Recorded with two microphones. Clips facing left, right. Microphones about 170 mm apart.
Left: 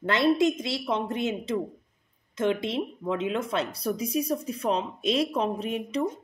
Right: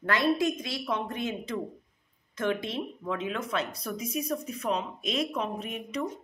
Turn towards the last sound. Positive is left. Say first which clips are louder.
# left 5 dB
turn(degrees=30)  # may be behind; listen again after turning